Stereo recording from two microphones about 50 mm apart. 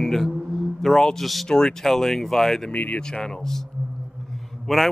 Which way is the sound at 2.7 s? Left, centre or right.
Left.